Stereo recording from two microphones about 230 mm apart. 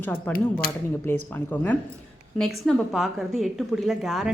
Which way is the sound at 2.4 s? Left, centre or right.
Centre.